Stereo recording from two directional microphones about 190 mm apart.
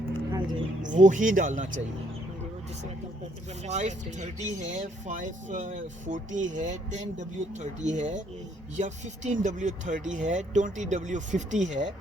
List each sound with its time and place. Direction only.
0.3 s a sound: 20° right (ahead or behind)
0.8 s speech: 40° right (ahead or behind)
3.7 s speech: 35° right (ahead or behind)